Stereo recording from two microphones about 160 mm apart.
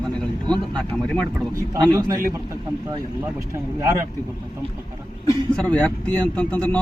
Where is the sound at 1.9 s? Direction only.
20° right (ahead or behind).